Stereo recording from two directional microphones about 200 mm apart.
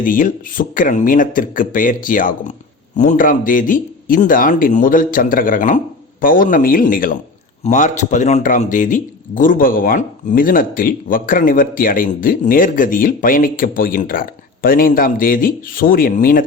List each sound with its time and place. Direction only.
0.0 s speech: 40° left (ahead or behind)